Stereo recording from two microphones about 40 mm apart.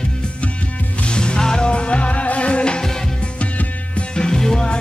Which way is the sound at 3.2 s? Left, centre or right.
Left.